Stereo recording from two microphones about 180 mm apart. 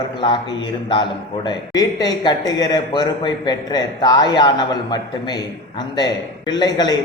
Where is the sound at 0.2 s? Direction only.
25° left (ahead or behind).